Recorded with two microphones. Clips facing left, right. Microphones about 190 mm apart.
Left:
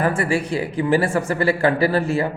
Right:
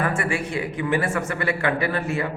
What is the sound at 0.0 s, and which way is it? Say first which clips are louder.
A man's voice: left 4 dB; 35° left (ahead or behind).